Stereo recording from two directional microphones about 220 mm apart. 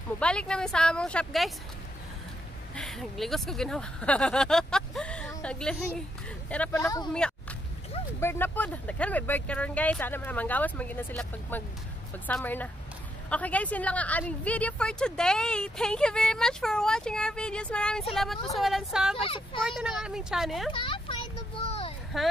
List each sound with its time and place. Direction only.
0.2 s a woman's voice: 5° left (ahead or behind)
2.7 s a woman's voice: centre (ahead or behind)
7.1 s a woman's voice: 5° left (ahead or behind)
19.2 s speech: 25° left (ahead or behind)
19.6 s a woman's voice: centre (ahead or behind)
20.7 s a sound: 20° left (ahead or behind)
22.1 s a woman's voice: centre (ahead or behind)